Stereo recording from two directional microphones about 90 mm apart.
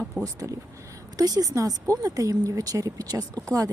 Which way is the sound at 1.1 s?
45° right (ahead or behind).